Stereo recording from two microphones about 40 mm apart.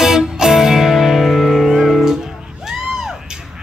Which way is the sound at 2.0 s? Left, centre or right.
Centre.